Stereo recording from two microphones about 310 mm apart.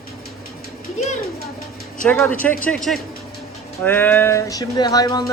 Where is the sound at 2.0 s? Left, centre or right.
Centre.